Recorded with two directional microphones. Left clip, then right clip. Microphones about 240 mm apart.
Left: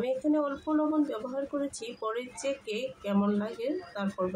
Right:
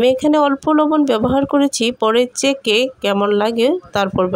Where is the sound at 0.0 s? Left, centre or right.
Right.